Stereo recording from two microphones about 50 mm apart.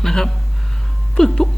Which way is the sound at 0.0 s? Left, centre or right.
Centre.